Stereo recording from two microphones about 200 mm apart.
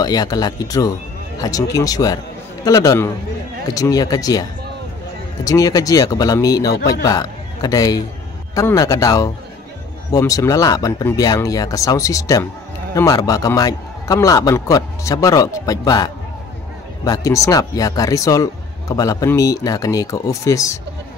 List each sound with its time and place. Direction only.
0.0 s a man's voice: 20° left (ahead or behind)